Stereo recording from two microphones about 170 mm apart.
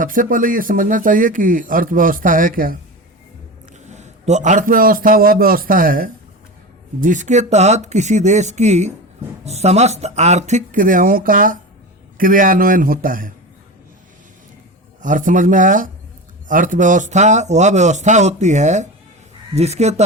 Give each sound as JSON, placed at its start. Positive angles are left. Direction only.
{"t": 0.0, "sound": "speech", "side_deg": -55}
{"t": 3.8, "sound": "a man's voice", "side_deg": -40}
{"t": 15.0, "sound": "speech", "side_deg": -50}